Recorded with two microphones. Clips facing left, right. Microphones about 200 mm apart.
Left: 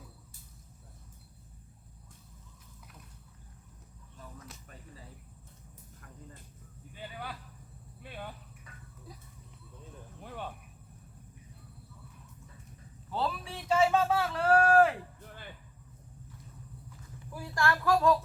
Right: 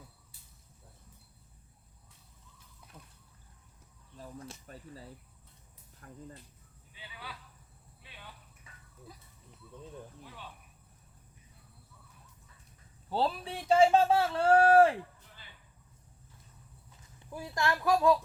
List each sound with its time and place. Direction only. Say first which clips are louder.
4.2 s a sound: right 4 dB; 30° right (ahead or behind)
6.9 s speech: left 6 dB; 50° left (ahead or behind)
8.0 s vehicle: left 10 dB; 50° left (ahead or behind)
10.2 s a sound: left 8 dB; 55° left (ahead or behind)
13.1 s speech: right 3 dB; 30° right (ahead or behind)
17.3 s speech: left 1 dB; 20° right (ahead or behind)